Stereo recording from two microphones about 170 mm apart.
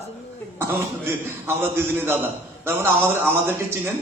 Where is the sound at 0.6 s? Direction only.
15° right (ahead or behind).